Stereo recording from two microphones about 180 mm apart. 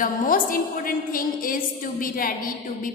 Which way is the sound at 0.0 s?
50° left (ahead or behind).